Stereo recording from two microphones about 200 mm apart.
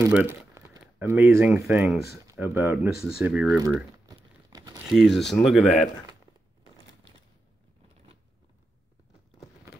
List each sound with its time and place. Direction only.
0.1 s speech: 10° right (ahead or behind)
3.5 s crumpling: 15° right (ahead or behind)
4.8 s speech: centre (ahead or behind)